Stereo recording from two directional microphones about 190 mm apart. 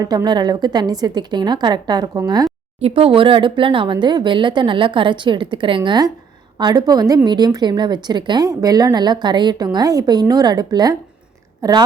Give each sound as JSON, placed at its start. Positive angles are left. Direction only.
{"t": 0.0, "sound": "a woman's voice", "side_deg": -20}